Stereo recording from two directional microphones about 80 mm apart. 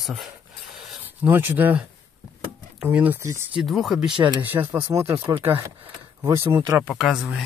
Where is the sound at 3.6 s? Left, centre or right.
Centre.